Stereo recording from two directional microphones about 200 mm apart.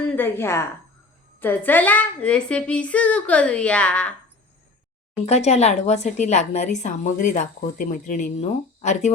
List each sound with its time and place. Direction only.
0.0 s a woman's voice: 10° left (ahead or behind)
5.2 s a woman's voice: 30° left (ahead or behind)